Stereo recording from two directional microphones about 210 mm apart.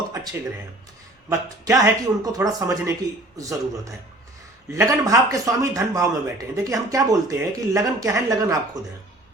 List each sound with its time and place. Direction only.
1.3 s speech: 15° right (ahead or behind)